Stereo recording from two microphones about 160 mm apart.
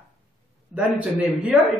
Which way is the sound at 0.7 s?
5° right (ahead or behind).